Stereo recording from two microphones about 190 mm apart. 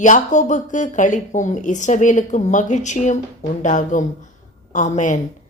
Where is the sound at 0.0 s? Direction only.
40° left (ahead or behind).